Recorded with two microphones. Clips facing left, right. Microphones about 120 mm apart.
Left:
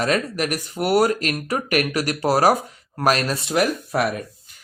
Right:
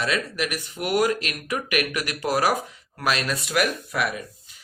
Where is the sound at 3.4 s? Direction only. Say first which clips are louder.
Left 3 dB; 30° left (ahead or behind).